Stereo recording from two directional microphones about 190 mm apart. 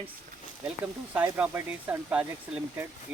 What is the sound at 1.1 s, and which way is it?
Speech, 10° right (ahead or behind).